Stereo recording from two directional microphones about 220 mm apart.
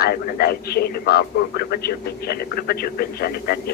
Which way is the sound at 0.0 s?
45° left (ahead or behind).